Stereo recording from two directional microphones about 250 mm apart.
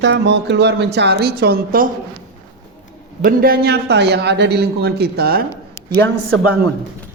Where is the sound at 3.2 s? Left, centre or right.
Right.